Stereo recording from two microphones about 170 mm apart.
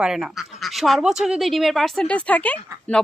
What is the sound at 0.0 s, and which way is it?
A woman's voice, 5° right (ahead or behind).